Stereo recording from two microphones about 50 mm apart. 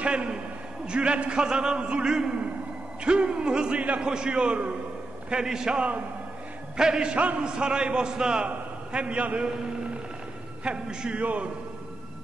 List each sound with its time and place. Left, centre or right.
0.0 s a man's voice: right
5.3 s a man's voice: centre
10.6 s a man's voice: centre